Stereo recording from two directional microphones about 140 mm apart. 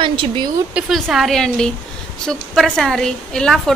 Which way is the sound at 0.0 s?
35° right (ahead or behind).